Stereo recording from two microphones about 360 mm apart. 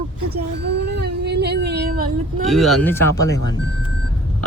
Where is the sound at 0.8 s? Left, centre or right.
Right.